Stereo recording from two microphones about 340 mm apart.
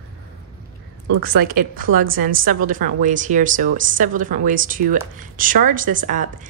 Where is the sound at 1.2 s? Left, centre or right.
Right.